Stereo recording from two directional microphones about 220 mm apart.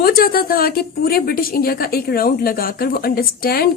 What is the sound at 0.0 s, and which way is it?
A woman's voice, 40° left (ahead or behind).